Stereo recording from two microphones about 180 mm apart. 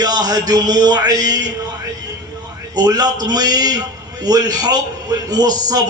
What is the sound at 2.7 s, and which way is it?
A man's voice, 20° right (ahead or behind).